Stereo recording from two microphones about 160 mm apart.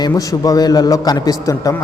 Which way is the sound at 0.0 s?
20° left (ahead or behind).